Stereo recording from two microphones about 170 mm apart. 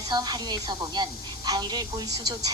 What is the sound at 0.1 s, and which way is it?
A woman's voice, 25° right (ahead or behind).